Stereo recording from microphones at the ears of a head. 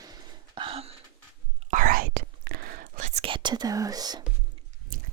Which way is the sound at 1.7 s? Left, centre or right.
Right.